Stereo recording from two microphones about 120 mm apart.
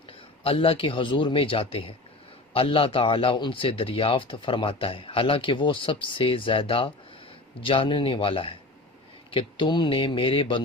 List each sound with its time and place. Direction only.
0.4 s a man's voice: 50° left (ahead or behind)